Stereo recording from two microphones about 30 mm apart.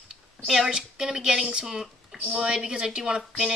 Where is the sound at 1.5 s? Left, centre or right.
Right.